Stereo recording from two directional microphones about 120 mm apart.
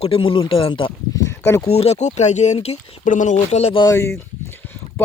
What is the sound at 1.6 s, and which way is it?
Speech, 60° left (ahead or behind).